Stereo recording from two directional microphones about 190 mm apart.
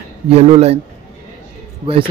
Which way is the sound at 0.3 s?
35° right (ahead or behind).